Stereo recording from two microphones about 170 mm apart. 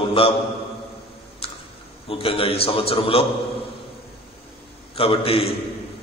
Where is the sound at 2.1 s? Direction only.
30° left (ahead or behind).